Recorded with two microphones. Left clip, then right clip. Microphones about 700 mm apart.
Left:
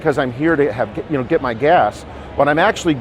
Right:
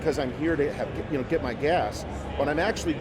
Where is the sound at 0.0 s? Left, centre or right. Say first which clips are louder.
Left 10 dB; left.